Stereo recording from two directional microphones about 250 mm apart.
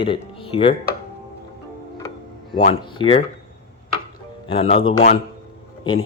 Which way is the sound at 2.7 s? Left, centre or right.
Left.